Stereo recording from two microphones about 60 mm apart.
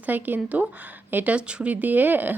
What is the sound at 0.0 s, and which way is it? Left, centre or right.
A woman's voice, right.